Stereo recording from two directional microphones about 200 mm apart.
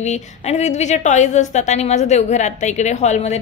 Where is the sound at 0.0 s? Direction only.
35° left (ahead or behind).